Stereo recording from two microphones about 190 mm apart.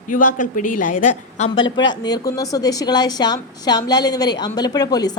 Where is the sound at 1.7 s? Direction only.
25° left (ahead or behind).